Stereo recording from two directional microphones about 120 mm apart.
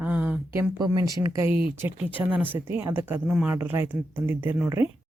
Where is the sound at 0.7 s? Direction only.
30° right (ahead or behind).